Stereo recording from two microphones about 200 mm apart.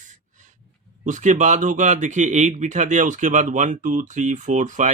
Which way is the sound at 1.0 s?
40° right (ahead or behind).